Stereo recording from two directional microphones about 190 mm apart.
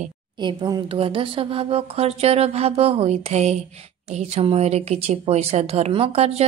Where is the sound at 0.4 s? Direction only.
25° right (ahead or behind).